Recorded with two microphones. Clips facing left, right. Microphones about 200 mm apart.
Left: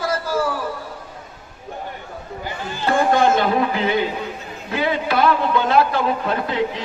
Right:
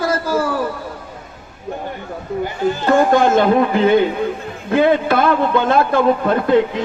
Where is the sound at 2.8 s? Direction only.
45° right (ahead or behind).